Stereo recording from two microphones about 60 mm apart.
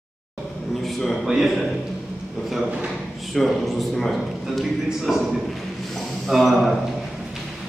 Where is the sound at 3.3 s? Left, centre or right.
Centre.